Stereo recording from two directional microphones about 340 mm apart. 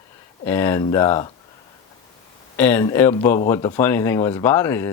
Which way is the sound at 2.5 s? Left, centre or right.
Centre.